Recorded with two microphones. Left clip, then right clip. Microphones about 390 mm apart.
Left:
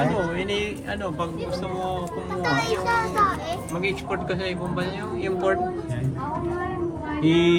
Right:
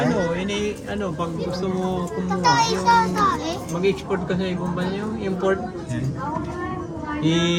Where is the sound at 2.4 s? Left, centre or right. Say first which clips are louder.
Right 5 dB; centre.